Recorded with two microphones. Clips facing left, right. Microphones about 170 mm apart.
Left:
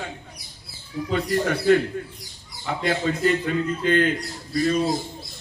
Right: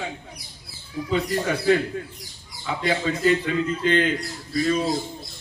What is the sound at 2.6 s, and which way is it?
Speech, 50° left (ahead or behind).